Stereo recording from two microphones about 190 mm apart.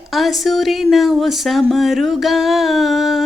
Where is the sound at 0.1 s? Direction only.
Centre (ahead or behind).